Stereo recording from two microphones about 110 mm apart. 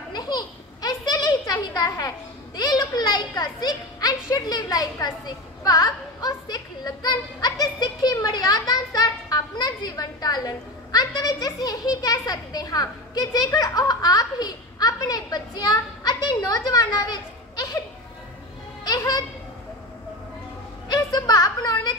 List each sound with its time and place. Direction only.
0.1 s a child's voice: 40° left (ahead or behind)
18.9 s children playing: 35° left (ahead or behind)
20.9 s a sound: 35° left (ahead or behind)